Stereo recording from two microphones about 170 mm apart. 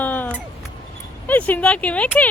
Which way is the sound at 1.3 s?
10° left (ahead or behind).